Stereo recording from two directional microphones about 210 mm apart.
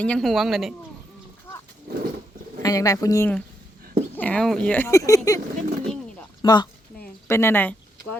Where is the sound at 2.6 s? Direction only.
15° left (ahead or behind).